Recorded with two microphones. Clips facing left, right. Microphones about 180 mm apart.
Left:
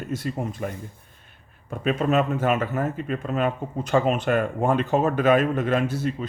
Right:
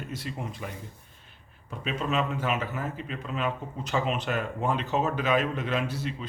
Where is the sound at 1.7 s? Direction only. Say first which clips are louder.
Left 8 dB; 50° left (ahead or behind).